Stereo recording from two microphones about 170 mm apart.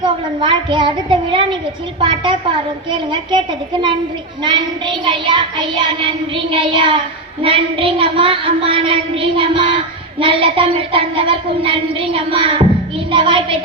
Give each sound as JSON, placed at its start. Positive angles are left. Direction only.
{"t": 0.0, "sound": "child singing", "side_deg": -25}